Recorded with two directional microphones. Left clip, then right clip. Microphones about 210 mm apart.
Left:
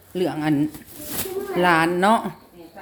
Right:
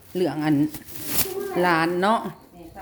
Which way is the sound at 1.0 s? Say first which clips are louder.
Right 2 dB; 35° right (ahead or behind).